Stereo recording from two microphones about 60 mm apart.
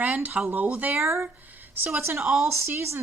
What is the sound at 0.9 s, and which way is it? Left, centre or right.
Speech, right.